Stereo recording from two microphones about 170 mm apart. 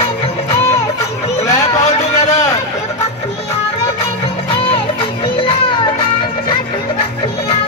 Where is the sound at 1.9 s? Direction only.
40° left (ahead or behind).